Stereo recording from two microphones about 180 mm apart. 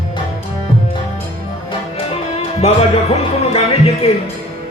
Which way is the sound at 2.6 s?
35° left (ahead or behind).